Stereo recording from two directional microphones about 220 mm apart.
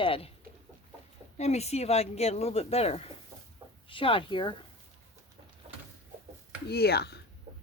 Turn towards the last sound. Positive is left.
turn(degrees=-30)  # may be behind; listen again after turning